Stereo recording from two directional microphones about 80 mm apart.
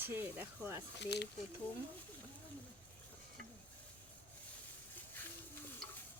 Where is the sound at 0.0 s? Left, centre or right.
Right.